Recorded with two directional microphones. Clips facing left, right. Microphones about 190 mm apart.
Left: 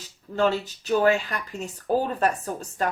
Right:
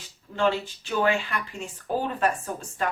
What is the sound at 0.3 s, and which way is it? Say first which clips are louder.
A woman's voice: left 2 dB; 40° left (ahead or behind).